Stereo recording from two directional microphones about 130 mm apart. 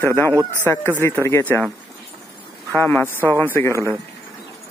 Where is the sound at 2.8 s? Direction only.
15° left (ahead or behind).